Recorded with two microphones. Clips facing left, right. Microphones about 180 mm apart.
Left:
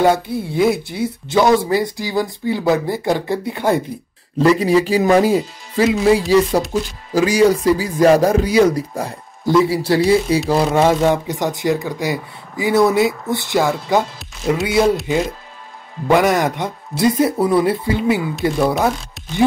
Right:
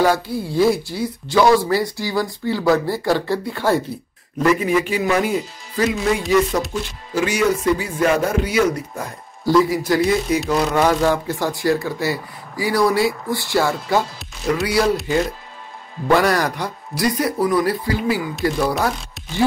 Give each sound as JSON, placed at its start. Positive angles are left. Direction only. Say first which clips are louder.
{"t": 0.0, "sound": "speech", "louder": "left 2 dB", "side_deg": 25}
{"t": 4.4, "sound": "speech", "louder": "left 4 dB", "side_deg": 35}
{"t": 9.4, "sound": "speech", "louder": "left 1 dB", "side_deg": 20}
{"t": 16.1, "sound": "speech", "louder": "left 2 dB", "side_deg": 20}